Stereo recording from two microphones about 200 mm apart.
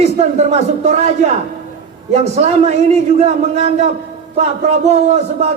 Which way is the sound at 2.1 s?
35° right (ahead or behind).